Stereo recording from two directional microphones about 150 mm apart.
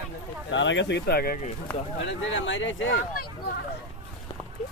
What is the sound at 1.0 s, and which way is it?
Speech, 90° left.